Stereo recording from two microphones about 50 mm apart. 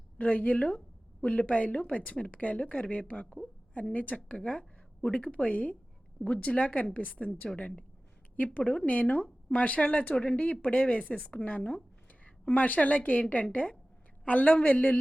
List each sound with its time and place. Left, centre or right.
0.2 s a woman's voice: left